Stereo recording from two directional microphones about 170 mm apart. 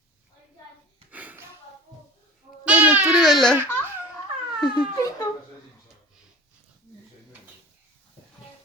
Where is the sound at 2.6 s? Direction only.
10° right (ahead or behind).